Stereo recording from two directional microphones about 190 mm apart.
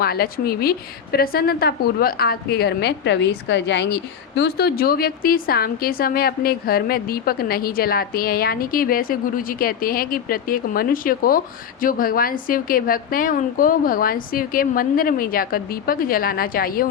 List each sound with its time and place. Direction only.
0.0 s a woman's voice: 55° left (ahead or behind)